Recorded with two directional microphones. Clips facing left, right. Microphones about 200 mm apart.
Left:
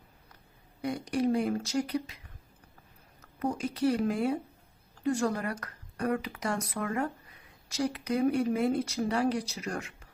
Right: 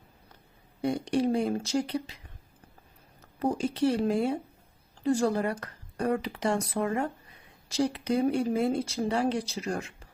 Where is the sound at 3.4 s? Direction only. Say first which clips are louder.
Right 2 dB; 30° right (ahead or behind).